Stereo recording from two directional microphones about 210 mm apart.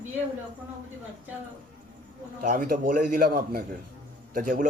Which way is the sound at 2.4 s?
40° right (ahead or behind).